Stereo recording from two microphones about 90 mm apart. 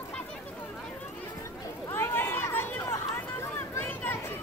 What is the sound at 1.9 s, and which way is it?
Run, 25° left (ahead or behind).